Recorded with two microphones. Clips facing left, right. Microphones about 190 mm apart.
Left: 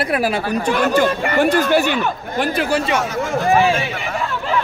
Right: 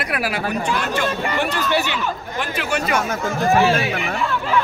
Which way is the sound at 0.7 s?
50° left (ahead or behind).